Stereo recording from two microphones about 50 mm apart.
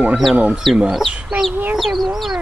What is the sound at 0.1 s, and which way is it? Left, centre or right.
Speech, centre.